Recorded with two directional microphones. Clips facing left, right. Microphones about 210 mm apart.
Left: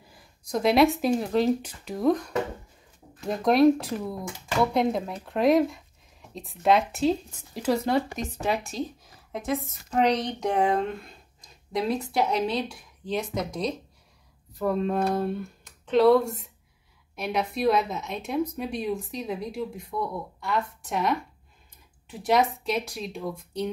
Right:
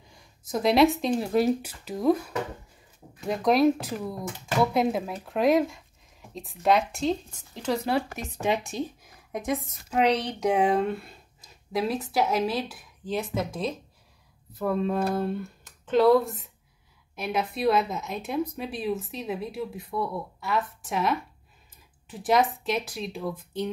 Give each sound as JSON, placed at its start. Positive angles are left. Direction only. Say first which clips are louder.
{"t": 0.1, "sound": "speech", "louder": "left 1 dB", "side_deg": 0}
{"t": 8.2, "sound": "a woman's voice", "louder": "right 1 dB", "side_deg": -15}
{"t": 9.8, "sound": "speech", "louder": "even", "side_deg": -5}